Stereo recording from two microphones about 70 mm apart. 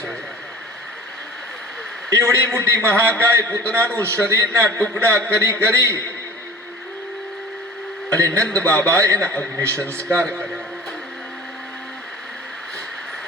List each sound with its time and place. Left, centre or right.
2.0 s a man's voice: right
3.4 s a man's voice: centre
3.9 s a man's voice: right
8.3 s a man's voice: centre
8.9 s a man's voice: right
9.2 s a man's voice: centre
9.6 s a man's voice: right
9.8 s a man's voice: centre